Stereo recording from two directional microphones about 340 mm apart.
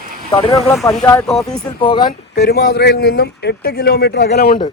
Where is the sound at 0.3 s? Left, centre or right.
Centre.